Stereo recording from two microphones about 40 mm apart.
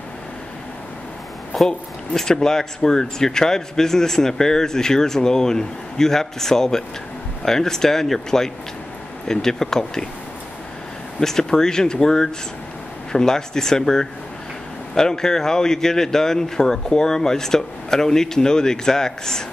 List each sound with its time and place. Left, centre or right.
1.7 s speech: centre
11.1 s speech: centre